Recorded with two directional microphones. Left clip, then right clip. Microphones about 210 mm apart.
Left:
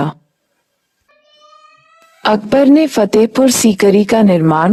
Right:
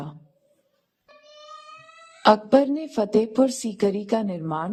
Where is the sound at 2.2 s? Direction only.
50° left (ahead or behind).